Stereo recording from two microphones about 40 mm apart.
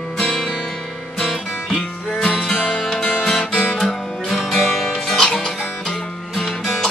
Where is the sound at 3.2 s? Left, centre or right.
Centre.